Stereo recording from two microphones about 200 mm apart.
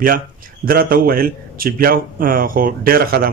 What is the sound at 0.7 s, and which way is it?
Speech, 45° right (ahead or behind).